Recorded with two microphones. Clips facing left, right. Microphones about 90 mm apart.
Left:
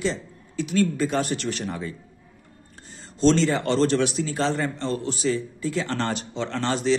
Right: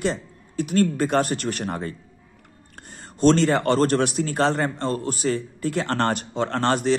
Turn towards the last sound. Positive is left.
turn(degrees=-55)  # may be behind; listen again after turning